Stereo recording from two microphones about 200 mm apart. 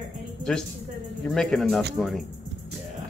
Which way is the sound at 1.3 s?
Centre (ahead or behind).